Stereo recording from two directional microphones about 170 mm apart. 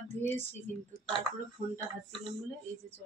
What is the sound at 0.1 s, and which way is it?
Speech, 40° right (ahead or behind).